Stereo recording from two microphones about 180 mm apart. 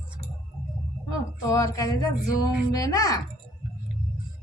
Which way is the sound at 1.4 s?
20° left (ahead or behind).